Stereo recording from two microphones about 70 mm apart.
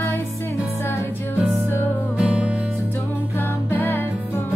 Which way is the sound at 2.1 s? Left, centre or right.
Centre.